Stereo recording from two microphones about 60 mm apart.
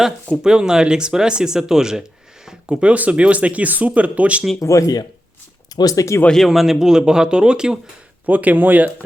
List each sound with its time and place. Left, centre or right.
0.3 s speech: centre
4.6 s speech: left
5.7 s speech: left
6.2 s speech: centre
8.3 s speech: right